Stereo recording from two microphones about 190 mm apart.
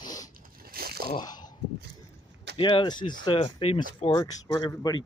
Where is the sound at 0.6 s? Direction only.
50° right (ahead or behind).